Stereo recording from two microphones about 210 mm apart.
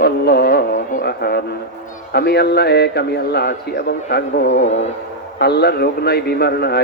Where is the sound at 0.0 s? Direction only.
50° left (ahead or behind).